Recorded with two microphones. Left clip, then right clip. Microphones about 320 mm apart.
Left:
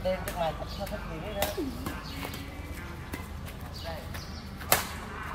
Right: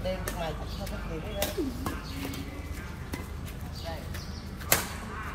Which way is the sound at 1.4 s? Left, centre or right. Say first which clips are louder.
Left 2 dB; centre.